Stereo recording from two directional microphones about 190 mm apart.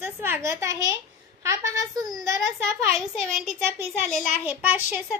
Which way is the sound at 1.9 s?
20° right (ahead or behind).